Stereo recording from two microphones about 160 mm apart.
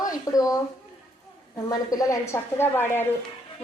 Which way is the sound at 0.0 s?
20° left (ahead or behind).